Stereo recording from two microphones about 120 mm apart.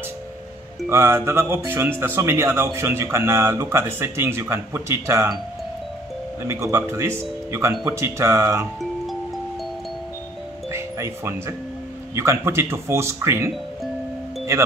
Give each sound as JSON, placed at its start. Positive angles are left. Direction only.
{"t": 0.8, "sound": "speech", "side_deg": -20}
{"t": 6.4, "sound": "speech", "side_deg": -25}
{"t": 10.7, "sound": "doorbell", "side_deg": -20}
{"t": 12.2, "sound": "speech", "side_deg": -20}
{"t": 14.5, "sound": "speech", "side_deg": -25}